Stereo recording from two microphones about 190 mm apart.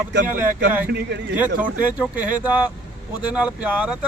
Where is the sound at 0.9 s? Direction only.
60° right (ahead or behind).